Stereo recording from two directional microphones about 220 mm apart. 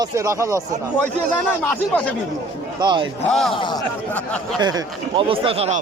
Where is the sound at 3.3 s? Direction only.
Centre (ahead or behind).